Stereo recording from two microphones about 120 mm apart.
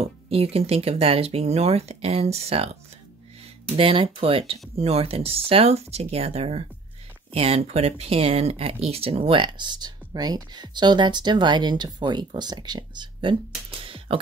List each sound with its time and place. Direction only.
0.0 s speech: 55° right (ahead or behind)